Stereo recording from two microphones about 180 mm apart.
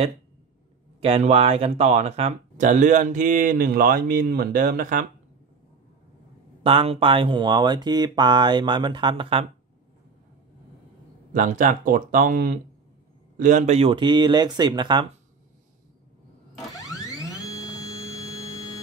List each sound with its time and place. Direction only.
1.0 s speech: 35° right (ahead or behind); by 4.9 s 50° right (ahead or behind)
6.6 s speech: 35° right (ahead or behind)
11.3 s speech: 45° right (ahead or behind); by 15.0 s 25° right (ahead or behind)